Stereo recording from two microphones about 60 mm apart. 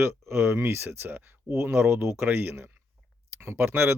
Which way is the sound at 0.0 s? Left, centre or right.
Right.